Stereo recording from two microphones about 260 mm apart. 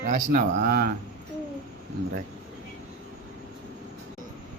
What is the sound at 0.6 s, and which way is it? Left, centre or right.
Speech, right.